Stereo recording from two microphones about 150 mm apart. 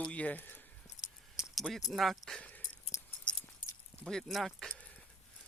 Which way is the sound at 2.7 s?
45° left (ahead or behind).